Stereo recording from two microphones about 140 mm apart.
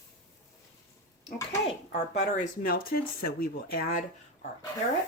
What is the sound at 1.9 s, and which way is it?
Speech, 60° left (ahead or behind).